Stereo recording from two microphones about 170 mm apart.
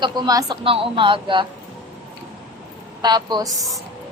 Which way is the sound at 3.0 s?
25° right (ahead or behind).